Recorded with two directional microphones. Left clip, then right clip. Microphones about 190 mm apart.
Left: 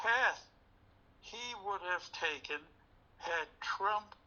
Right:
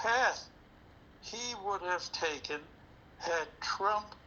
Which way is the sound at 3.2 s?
25° right (ahead or behind).